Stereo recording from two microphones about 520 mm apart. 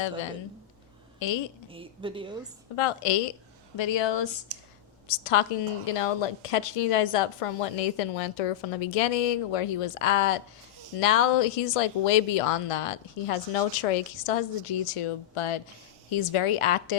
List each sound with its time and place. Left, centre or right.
1.2 s speech: left
1.7 s a woman's voice: centre
2.7 s a woman's voice: left
3.8 s speech: left
4.5 s speech: right
5.0 s a woman's voice: left